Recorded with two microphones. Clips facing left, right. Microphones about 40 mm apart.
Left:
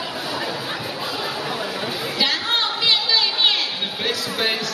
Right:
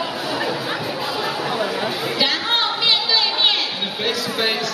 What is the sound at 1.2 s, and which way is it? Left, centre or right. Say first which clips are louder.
Chatter: right 5 dB; centre.